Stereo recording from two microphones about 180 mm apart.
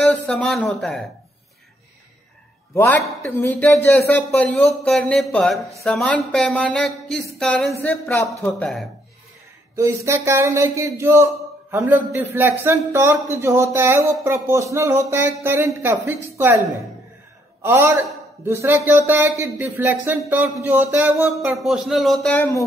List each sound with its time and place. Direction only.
0.0 s speech: 5° left (ahead or behind)
2.7 s a man's voice: 10° left (ahead or behind)
9.8 s a man's voice: 15° right (ahead or behind)
17.6 s a man's voice: 15° right (ahead or behind); by 22.7 s 15° left (ahead or behind)